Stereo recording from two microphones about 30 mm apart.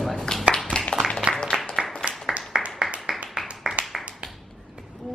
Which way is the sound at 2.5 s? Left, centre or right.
Right.